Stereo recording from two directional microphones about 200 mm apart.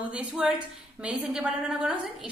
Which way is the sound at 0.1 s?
5° right (ahead or behind).